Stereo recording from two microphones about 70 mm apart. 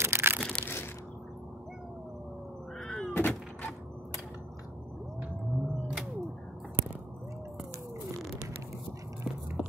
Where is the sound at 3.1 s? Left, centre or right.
Left.